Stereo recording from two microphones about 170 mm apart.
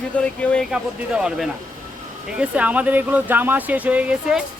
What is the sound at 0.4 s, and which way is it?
A woman's voice, 5° left (ahead or behind).